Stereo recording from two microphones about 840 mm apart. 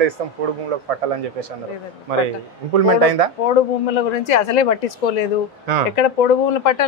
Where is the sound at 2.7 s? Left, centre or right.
Right.